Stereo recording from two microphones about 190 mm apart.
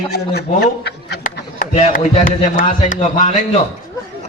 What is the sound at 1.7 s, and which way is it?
Speech, 35° left (ahead or behind).